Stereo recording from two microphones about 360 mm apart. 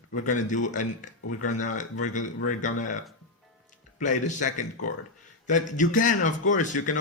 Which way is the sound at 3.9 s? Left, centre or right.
Left.